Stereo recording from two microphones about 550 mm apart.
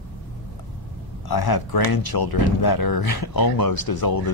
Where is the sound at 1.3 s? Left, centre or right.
Left.